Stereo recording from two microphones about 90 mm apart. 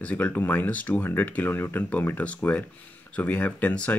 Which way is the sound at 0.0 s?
20° left (ahead or behind).